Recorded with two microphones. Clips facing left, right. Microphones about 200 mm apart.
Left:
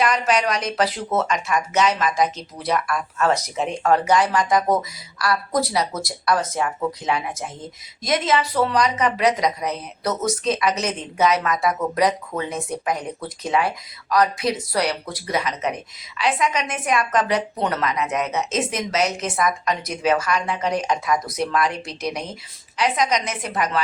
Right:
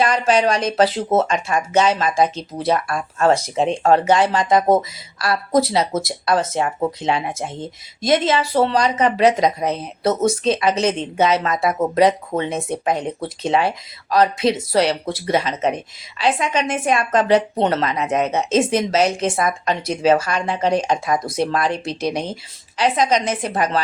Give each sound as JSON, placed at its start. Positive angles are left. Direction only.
{"t": 0.0, "sound": "speech", "side_deg": -30}